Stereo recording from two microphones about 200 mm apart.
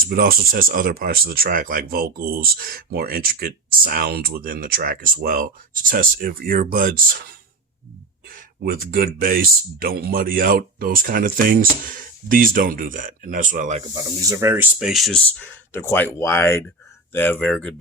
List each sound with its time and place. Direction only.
0.1 s speech: 45° right (ahead or behind)
8.6 s speech: 50° right (ahead or behind)
13.9 s speech: 15° right (ahead or behind); by 17.7 s 5° left (ahead or behind)